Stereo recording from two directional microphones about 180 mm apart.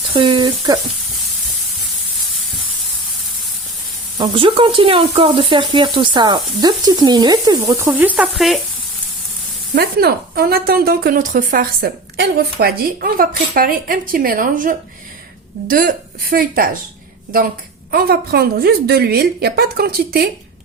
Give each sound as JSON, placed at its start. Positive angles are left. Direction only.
{"t": 0.1, "sound": "speech", "side_deg": -25}
{"t": 4.2, "sound": "speech", "side_deg": -30}
{"t": 9.7, "sound": "a woman's voice", "side_deg": -60}
{"t": 17.9, "sound": "speech", "side_deg": -60}